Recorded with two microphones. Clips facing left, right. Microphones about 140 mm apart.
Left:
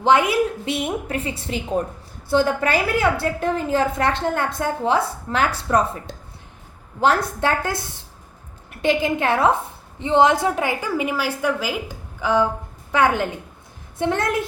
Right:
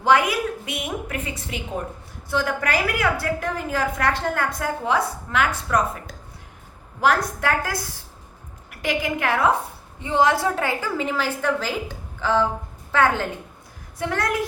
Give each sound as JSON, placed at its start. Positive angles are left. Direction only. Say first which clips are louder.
{"t": 0.0, "sound": "a woman's voice", "louder": "left 2 dB", "side_deg": 25}